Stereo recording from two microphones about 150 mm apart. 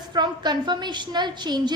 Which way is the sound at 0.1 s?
30° right (ahead or behind).